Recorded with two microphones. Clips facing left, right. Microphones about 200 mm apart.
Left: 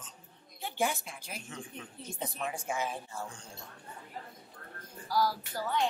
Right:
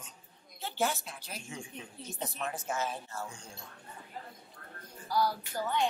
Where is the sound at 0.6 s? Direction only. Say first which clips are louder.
Even; 15° left (ahead or behind).